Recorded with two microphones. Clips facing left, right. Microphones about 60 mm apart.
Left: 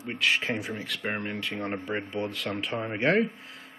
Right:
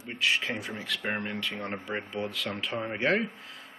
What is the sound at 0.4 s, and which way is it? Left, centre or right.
Speech, centre.